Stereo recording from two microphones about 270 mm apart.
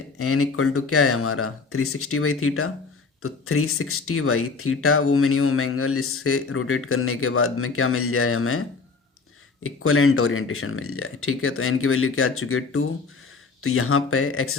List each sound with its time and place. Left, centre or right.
0.2 s speech: left
9.6 s speech: left